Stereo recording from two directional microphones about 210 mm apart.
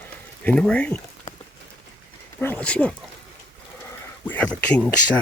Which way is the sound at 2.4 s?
10° left (ahead or behind).